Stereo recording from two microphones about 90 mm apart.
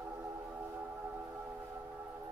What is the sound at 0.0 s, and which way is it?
Music, 20° right (ahead or behind).